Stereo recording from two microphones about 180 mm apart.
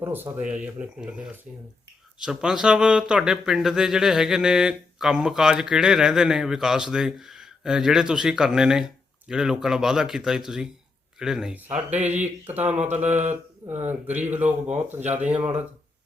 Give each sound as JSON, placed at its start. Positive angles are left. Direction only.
{"t": 0.0, "sound": "speech", "side_deg": -10}
{"t": 13.0, "sound": "speech", "side_deg": -40}
{"t": 13.7, "sound": "speech", "side_deg": -10}